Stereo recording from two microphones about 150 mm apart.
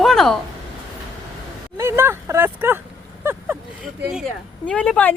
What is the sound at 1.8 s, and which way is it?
Speech, 15° right (ahead or behind).